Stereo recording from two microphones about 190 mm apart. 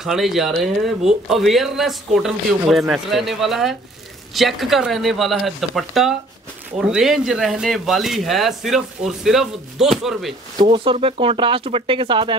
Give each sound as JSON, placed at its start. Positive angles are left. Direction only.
{"t": 0.0, "sound": "speech", "side_deg": 0}
{"t": 10.7, "sound": "speech", "side_deg": -30}